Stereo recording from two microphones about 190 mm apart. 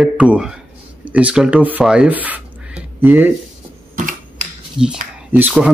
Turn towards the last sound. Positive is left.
turn(degrees=-5)  # may be behind; listen again after turning